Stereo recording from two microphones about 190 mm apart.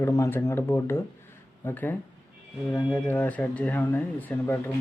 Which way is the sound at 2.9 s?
10° left (ahead or behind).